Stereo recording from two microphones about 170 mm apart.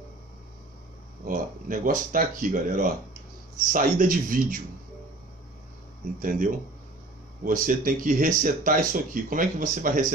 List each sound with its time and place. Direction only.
1.2 s speech: 55° right (ahead or behind)
6.1 s speech: 55° right (ahead or behind)